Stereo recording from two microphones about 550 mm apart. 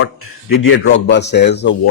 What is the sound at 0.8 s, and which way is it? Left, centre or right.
Speech, centre.